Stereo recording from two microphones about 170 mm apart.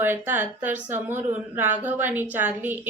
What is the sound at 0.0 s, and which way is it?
A woman's voice, 10° right (ahead or behind).